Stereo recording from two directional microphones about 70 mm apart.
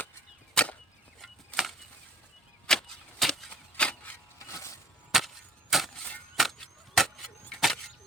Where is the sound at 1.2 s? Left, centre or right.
Centre.